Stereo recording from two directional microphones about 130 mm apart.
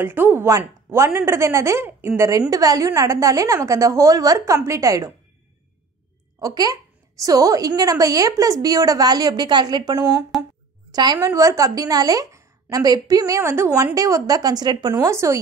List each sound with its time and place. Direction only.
0.0 s a woman's voice: 15° right (ahead or behind)
6.4 s a woman's voice: 30° right (ahead or behind)
10.3 s a sound: centre (ahead or behind)
10.9 s a woman's voice: 30° right (ahead or behind)
15.0 s a woman's voice: 25° right (ahead or behind)